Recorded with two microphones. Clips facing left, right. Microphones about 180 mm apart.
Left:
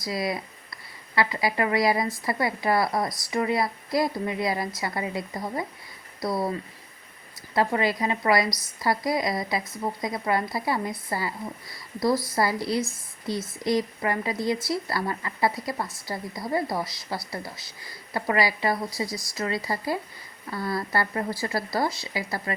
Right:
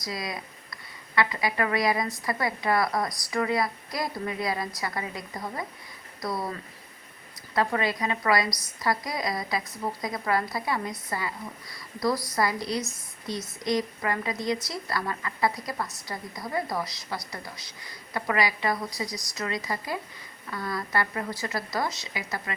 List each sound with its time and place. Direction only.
0.0 s a woman's voice: 25° left (ahead or behind)